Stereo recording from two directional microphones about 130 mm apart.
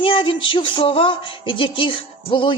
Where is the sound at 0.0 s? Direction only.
40° left (ahead or behind).